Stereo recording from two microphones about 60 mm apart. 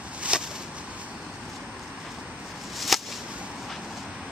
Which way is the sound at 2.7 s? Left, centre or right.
Centre.